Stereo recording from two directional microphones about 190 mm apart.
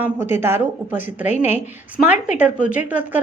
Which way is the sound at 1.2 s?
40° left (ahead or behind).